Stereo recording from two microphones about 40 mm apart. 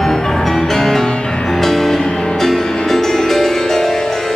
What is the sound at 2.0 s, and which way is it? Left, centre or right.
Music, left.